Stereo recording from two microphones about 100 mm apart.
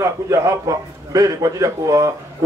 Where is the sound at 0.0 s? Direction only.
30° right (ahead or behind).